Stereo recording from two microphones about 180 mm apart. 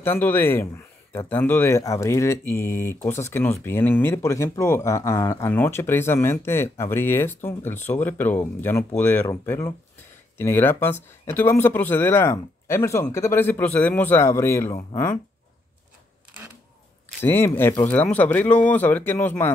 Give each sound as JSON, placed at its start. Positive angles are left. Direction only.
{"t": 0.0, "sound": "speech", "side_deg": 10}
{"t": 14.7, "sound": "speech", "side_deg": 25}
{"t": 17.2, "sound": "speech", "side_deg": 15}